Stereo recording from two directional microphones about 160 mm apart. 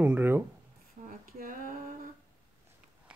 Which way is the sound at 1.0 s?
55° right (ahead or behind).